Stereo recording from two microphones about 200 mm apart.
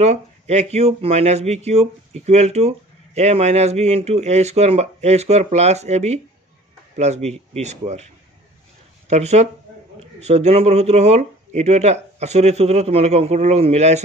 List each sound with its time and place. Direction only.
0.0 s speech: 35° right (ahead or behind)